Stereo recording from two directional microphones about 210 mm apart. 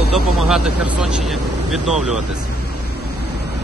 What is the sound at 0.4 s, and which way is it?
Speech, 5° right (ahead or behind).